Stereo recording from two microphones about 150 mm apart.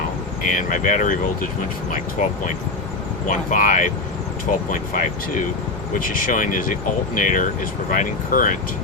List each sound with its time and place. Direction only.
0.4 s speech: 65° left (ahead or behind)
3.2 s speech: 60° left (ahead or behind)